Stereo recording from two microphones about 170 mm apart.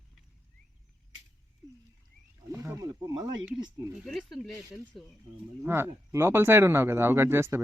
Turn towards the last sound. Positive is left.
turn(degrees=-15)  # may be behind; listen again after turning